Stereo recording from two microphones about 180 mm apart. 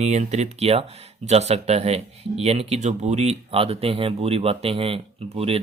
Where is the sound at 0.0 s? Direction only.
40° right (ahead or behind).